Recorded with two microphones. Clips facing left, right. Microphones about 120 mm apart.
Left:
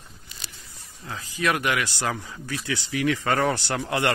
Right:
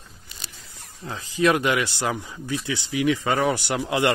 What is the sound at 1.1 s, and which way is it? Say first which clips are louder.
Speech: right 5 dB; 25° right (ahead or behind).